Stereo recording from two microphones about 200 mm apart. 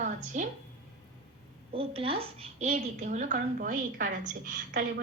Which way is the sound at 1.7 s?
30° right (ahead or behind).